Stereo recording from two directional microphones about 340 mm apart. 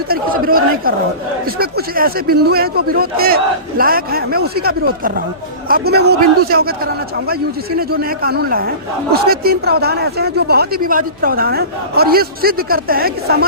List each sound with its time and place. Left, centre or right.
0.1 s a man's voice: right
7.8 s speech: right